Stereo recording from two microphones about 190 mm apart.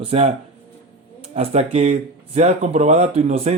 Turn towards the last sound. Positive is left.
turn(degrees=-35)  # may be behind; listen again after turning